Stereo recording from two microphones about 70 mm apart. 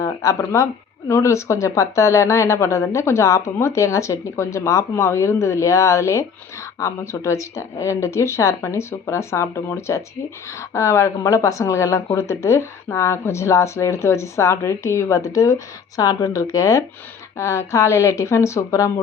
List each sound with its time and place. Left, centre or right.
0.0 s speech: left